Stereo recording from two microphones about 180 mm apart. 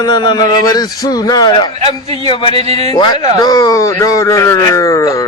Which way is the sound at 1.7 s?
35° right (ahead or behind).